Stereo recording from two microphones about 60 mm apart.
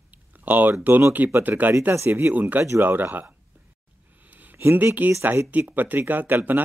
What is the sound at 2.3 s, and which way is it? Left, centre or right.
Speech, right.